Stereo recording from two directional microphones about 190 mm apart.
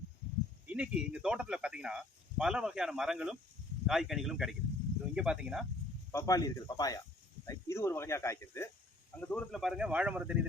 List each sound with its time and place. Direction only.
0.7 s speech: 5° right (ahead or behind)
6.1 s speech: 15° left (ahead or behind); by 10.3 s 5° right (ahead or behind)